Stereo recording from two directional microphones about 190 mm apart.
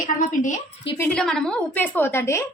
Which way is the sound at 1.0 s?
5° left (ahead or behind).